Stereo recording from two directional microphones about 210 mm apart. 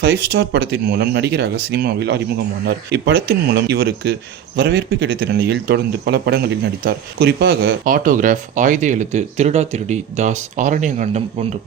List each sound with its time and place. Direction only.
0.0 s speech: 50° right (ahead or behind)